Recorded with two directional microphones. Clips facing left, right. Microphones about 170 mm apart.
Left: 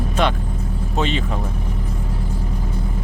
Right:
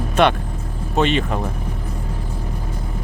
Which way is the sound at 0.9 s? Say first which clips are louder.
Right 4 dB; 65° right (ahead or behind).